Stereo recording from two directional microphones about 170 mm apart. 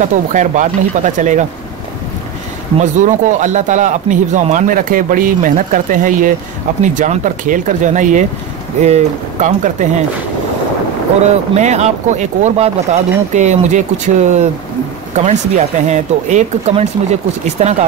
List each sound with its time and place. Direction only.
0.0 s speech: 50° right (ahead or behind)
2.8 s speech: 45° right (ahead or behind)
11.5 s speech: 40° right (ahead or behind)